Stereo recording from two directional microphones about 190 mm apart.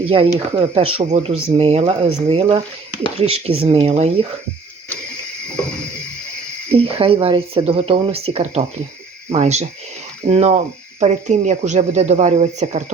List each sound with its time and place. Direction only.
0.0 s speech: 30° right (ahead or behind)
6.7 s speech: 30° right (ahead or behind)